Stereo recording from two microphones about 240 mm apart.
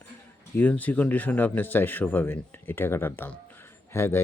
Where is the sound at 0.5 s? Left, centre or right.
Centre.